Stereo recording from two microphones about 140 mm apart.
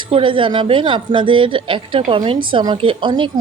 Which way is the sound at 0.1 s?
35° right (ahead or behind).